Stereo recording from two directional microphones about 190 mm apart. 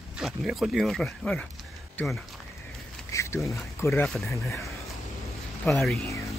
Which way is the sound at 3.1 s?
15° left (ahead or behind).